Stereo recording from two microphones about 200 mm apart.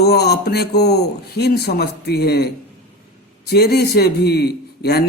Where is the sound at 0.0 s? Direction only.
55° left (ahead or behind).